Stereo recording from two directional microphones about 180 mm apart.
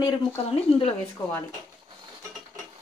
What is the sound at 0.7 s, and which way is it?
Speech, 30° left (ahead or behind).